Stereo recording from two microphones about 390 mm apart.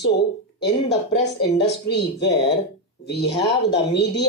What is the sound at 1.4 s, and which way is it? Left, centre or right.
Speech, left.